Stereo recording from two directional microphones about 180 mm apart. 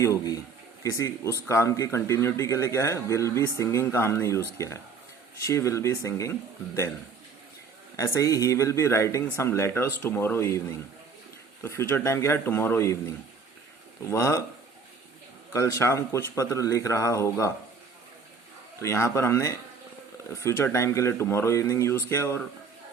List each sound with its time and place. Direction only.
0.0 s speech: 20° left (ahead or behind)
7.9 s speech: 15° left (ahead or behind)
11.6 s speech: 15° left (ahead or behind)
14.1 s speech: 15° left (ahead or behind)
15.5 s speech: 15° left (ahead or behind)
18.8 s speech: 15° left (ahead or behind)